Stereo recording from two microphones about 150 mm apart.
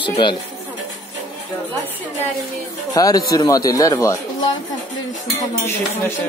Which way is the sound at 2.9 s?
25° left (ahead or behind).